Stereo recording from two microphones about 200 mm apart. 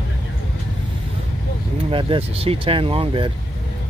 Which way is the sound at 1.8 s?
25° right (ahead or behind).